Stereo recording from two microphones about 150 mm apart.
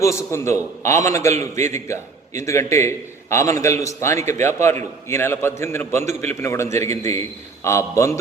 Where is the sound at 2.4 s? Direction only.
20° left (ahead or behind).